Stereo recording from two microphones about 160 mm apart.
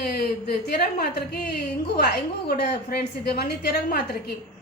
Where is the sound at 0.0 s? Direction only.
80° left.